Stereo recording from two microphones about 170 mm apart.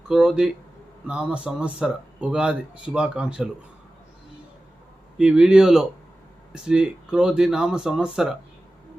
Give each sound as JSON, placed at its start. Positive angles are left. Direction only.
{"t": 0.1, "sound": "speech", "side_deg": -5}
{"t": 5.1, "sound": "speech", "side_deg": -5}